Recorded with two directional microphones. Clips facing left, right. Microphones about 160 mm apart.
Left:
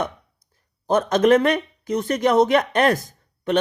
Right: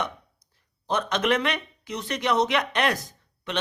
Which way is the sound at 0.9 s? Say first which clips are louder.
Left 8 dB; 45° left (ahead or behind).